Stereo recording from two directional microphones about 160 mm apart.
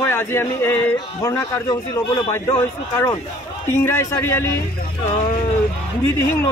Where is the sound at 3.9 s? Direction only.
15° left (ahead or behind).